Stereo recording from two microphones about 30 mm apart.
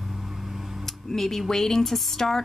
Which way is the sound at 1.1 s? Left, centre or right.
Centre.